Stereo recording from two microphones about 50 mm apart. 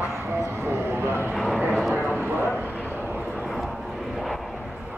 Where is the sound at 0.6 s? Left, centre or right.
Right.